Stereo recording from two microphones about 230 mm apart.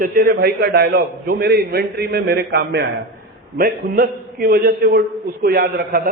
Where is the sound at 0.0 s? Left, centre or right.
Right.